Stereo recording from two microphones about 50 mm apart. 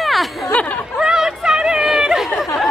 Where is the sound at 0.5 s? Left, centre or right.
Left.